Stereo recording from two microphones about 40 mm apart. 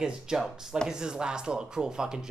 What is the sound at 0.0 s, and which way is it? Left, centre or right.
Speech, centre.